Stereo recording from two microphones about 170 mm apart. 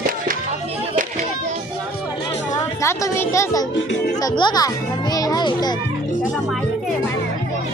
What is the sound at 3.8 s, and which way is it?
Speech, 90° left.